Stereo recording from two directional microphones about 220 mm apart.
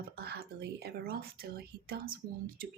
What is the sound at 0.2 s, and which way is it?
Speech, 45° right (ahead or behind).